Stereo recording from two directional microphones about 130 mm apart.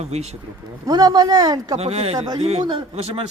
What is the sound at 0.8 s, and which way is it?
Speech, 30° right (ahead or behind).